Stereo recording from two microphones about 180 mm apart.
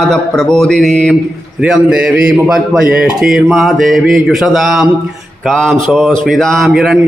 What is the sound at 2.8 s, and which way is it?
Speech, 55° right (ahead or behind).